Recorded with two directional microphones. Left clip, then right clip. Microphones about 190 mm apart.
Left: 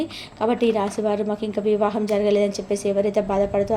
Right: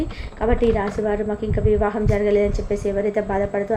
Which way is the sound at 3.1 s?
45° left (ahead or behind).